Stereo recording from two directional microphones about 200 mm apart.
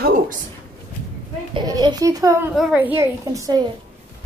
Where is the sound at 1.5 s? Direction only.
20° right (ahead or behind).